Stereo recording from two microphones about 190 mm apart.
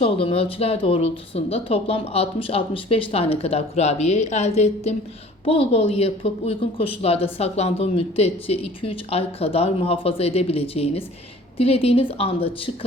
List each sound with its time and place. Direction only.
0.0 s a woman's voice: 30° left (ahead or behind)